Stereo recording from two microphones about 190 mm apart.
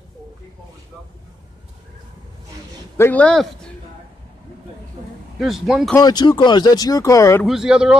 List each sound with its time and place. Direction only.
3.0 s speech: 5° left (ahead or behind)
5.4 s speech: centre (ahead or behind)
5.9 s speech: 20° left (ahead or behind)
7.4 s speech: 5° right (ahead or behind)